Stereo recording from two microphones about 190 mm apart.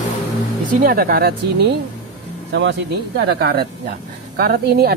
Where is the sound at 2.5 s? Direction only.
70° right (ahead or behind).